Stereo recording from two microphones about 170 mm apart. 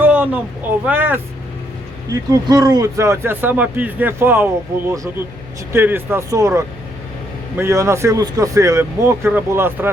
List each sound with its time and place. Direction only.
0.0 s a man's voice: 10° right (ahead or behind)